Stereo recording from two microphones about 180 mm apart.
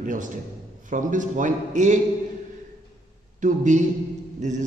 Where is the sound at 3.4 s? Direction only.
45° right (ahead or behind).